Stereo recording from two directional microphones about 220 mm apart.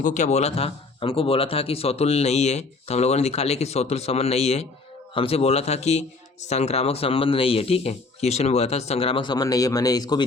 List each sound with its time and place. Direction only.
0.0 s speech: 35° left (ahead or behind); by 10.2 s 20° left (ahead or behind)